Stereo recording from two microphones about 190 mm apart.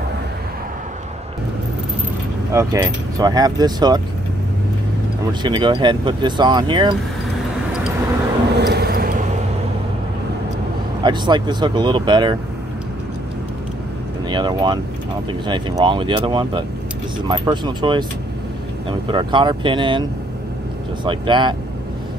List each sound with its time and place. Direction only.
2.5 s speech: 15° right (ahead or behind)
5.4 s speech: 25° right (ahead or behind)
8.5 s a sound: 60° right (ahead or behind)
11.0 s speech: 25° right (ahead or behind)
14.2 s speech: 25° right (ahead or behind)